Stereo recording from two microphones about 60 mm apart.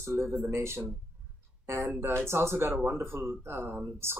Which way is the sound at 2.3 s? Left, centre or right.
Right.